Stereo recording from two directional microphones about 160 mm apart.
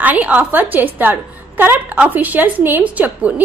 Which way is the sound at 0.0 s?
10° right (ahead or behind).